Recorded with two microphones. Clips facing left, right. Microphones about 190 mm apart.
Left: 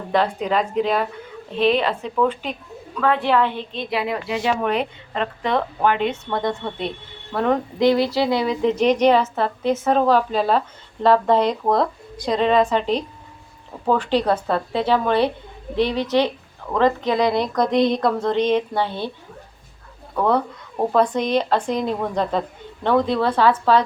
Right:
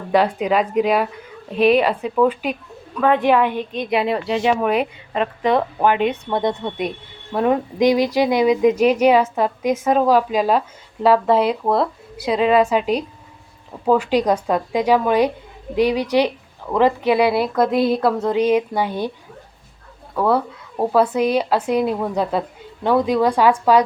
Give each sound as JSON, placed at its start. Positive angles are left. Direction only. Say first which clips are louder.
{"t": 0.1, "sound": "speech", "louder": "right 3 dB", "side_deg": -10}
{"t": 4.6, "sound": "speech", "louder": "right 3 dB", "side_deg": -10}
{"t": 20.1, "sound": "speech", "louder": "right 1 dB", "side_deg": -5}